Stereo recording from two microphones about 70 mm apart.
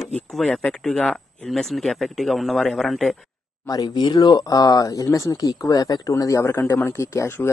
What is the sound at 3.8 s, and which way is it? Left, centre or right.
Speech, left.